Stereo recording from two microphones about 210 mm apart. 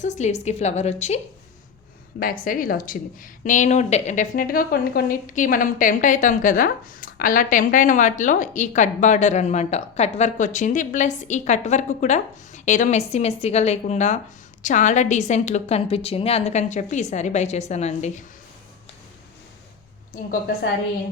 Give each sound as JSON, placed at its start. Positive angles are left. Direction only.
{"t": 0.0, "sound": "speech", "side_deg": 35}
{"t": 2.1, "sound": "speech", "side_deg": 45}